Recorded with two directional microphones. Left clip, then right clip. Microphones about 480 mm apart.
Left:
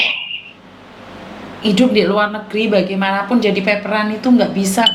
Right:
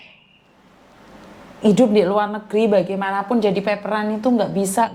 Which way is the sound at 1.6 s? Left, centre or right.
Right.